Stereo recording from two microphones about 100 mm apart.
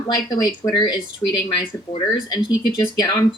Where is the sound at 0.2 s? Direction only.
40° left (ahead or behind).